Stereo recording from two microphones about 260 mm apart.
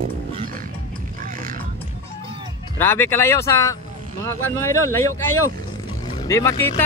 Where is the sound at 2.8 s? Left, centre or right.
Centre.